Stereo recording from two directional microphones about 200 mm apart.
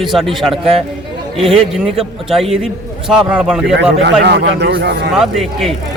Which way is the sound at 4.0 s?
60° right (ahead or behind).